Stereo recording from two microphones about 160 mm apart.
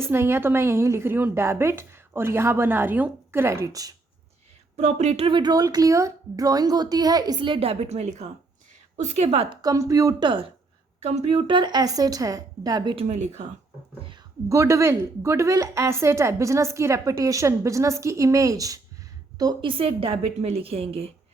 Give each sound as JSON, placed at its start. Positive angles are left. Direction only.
{"t": 0.0, "sound": "a woman's voice", "side_deg": -15}
{"t": 4.8, "sound": "a woman's voice", "side_deg": -45}
{"t": 9.6, "sound": "a woman's voice", "side_deg": -20}
{"t": 13.1, "sound": "speech", "side_deg": -45}
{"t": 14.5, "sound": "a woman's voice", "side_deg": -20}